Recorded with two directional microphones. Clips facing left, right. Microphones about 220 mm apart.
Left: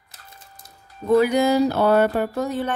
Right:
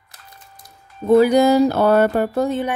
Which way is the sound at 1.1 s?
35° right (ahead or behind).